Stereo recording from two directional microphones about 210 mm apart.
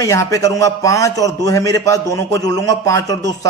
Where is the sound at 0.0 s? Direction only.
15° left (ahead or behind).